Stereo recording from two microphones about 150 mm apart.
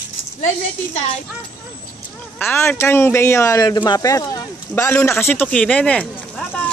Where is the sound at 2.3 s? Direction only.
15° left (ahead or behind).